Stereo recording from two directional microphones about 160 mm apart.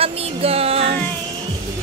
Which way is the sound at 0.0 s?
40° right (ahead or behind).